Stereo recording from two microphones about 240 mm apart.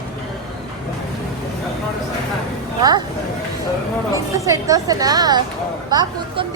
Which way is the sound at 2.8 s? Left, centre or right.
Centre.